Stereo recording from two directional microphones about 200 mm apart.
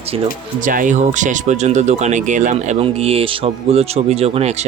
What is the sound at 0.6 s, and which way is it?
Speech, 40° right (ahead or behind).